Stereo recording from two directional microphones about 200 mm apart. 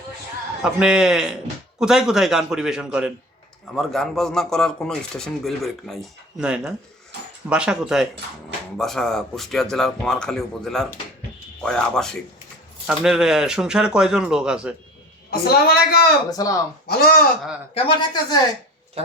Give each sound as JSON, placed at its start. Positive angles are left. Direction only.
{"t": 0.6, "sound": "speech", "side_deg": -5}
{"t": 15.3, "sound": "a woman's voice", "side_deg": 50}
{"t": 16.3, "sound": "speech", "side_deg": 15}
{"t": 16.8, "sound": "speech", "side_deg": 50}
{"t": 17.7, "sound": "speech", "side_deg": 25}